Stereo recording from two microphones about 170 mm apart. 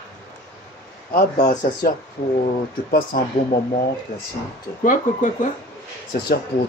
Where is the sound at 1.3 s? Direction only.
45° left (ahead or behind).